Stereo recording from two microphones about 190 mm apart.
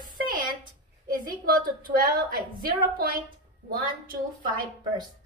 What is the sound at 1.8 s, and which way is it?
A woman's voice, 50° right (ahead or behind).